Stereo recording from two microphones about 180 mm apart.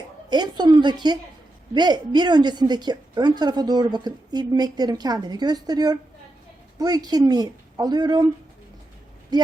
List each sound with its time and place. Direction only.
0.3 s a woman's voice: 25° right (ahead or behind)
9.3 s a man's voice: 25° right (ahead or behind)